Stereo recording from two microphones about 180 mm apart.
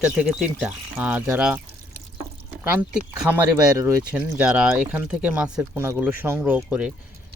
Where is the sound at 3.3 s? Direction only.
10° right (ahead or behind).